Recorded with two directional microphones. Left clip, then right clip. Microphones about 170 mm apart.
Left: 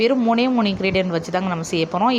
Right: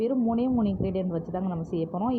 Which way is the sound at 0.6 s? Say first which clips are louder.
Left 10 dB; 30° left (ahead or behind).